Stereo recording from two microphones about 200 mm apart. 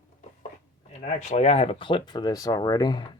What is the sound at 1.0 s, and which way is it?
Speech, 35° left (ahead or behind).